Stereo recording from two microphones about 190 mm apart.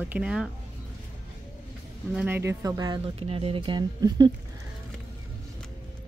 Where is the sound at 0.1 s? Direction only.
5° right (ahead or behind).